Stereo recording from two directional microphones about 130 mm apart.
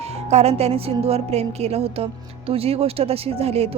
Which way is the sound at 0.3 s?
55° right (ahead or behind).